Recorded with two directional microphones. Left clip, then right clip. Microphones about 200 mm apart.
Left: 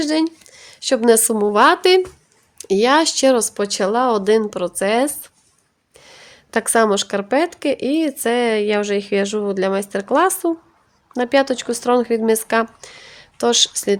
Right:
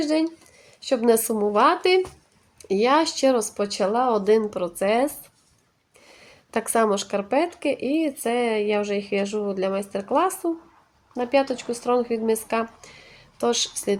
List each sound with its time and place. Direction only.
0.0 s a woman's voice: 40° left (ahead or behind)